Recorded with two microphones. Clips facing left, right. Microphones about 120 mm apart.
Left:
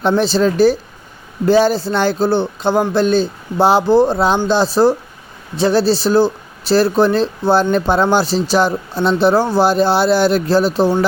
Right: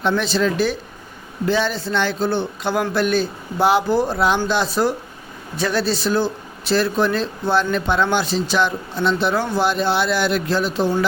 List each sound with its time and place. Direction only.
0.0 s speech: 35° left (ahead or behind)